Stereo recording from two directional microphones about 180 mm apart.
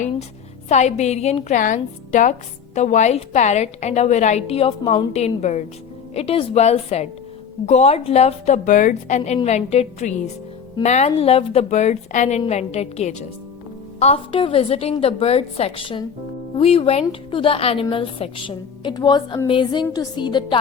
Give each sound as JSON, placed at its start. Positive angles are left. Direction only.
{"t": 0.7, "sound": "a woman's voice", "side_deg": 40}